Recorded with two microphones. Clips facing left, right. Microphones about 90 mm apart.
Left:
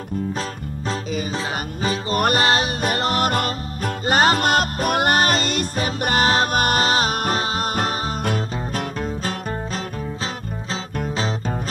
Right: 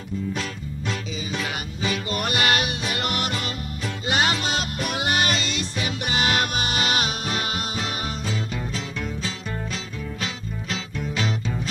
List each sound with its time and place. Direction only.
0.3 s music: 35° left (ahead or behind)
7.7 s music: 55° left (ahead or behind)